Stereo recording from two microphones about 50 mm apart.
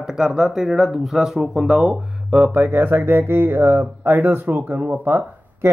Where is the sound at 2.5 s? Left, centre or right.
Right.